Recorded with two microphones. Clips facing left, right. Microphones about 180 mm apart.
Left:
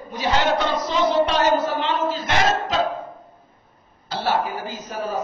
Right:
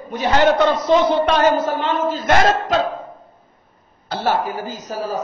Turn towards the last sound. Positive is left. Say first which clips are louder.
# right 3 dB
turn(degrees=-35)  # may be behind; listen again after turning